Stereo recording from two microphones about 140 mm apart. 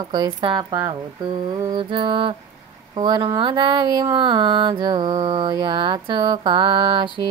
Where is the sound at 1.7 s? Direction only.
35° right (ahead or behind).